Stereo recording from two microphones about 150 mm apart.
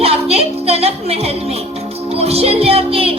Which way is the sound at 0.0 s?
40° right (ahead or behind).